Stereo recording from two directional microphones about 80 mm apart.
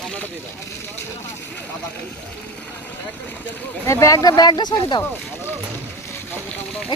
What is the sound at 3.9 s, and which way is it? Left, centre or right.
Speech, left.